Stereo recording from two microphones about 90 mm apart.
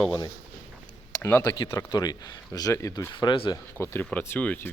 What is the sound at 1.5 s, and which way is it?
Speech, 45° left (ahead or behind).